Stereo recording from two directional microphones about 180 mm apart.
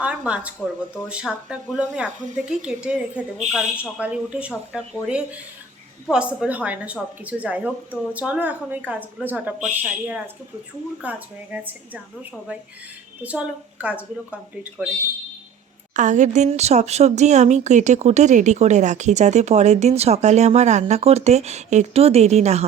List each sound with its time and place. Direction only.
0.0 s a woman's voice: 5° right (ahead or behind)
6.1 s a woman's voice: 5° right (ahead or behind)
11.0 s a woman's voice: 10° right (ahead or behind)
13.2 s a woman's voice: 5° right (ahead or behind)
16.0 s speech: 40° right (ahead or behind)